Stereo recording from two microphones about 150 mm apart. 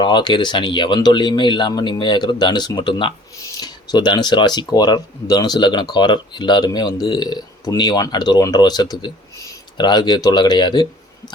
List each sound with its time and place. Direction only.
0.0 s speech: 30° left (ahead or behind)